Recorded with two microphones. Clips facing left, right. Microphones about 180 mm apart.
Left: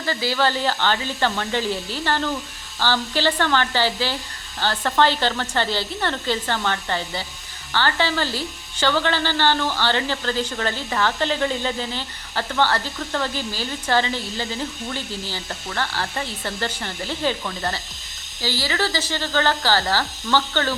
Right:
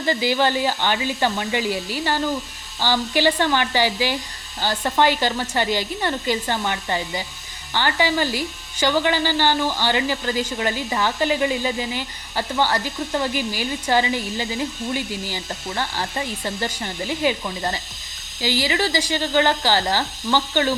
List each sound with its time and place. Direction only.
0.0 s speech: 15° right (ahead or behind)